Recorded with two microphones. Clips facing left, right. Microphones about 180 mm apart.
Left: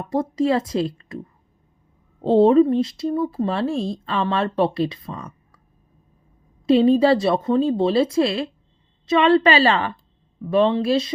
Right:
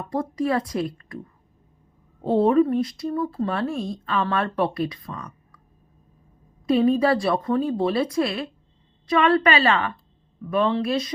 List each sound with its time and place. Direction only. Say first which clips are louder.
0.0 s speech: left 4 dB; 25° left (ahead or behind)
2.2 s speech: left 4 dB; 25° left (ahead or behind)
6.7 s speech: left 4 dB; 25° left (ahead or behind)